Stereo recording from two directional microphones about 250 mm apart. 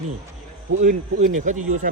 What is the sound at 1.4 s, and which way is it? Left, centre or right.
Speech, right.